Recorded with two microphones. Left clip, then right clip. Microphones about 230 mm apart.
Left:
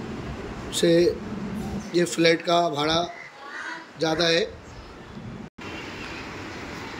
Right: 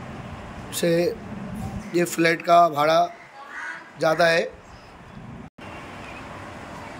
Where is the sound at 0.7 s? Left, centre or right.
Centre.